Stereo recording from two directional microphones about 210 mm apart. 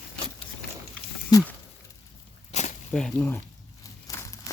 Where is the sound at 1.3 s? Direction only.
15° left (ahead or behind).